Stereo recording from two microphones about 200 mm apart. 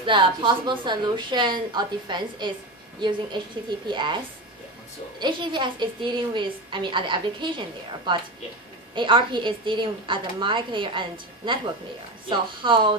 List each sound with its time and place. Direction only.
0.0 s a woman's voice: 25° right (ahead or behind)
3.9 s a woman's voice: 25° right (ahead or behind)
5.2 s a woman's voice: 25° right (ahead or behind)